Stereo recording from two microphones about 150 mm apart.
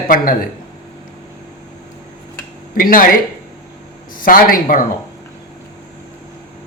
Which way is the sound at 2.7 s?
70° left (ahead or behind).